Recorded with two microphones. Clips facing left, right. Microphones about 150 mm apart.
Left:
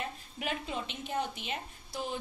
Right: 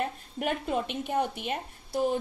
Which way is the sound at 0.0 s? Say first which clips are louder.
Right 7 dB; 50° right (ahead or behind).